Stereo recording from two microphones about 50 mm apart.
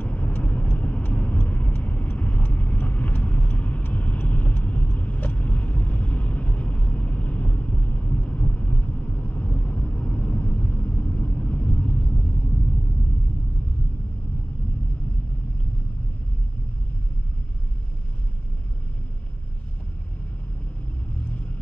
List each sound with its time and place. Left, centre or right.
0.0 s vehicle: left